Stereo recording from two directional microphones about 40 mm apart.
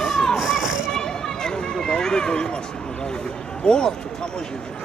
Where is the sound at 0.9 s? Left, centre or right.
Centre.